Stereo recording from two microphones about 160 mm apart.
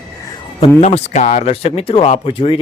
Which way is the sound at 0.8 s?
45° left (ahead or behind).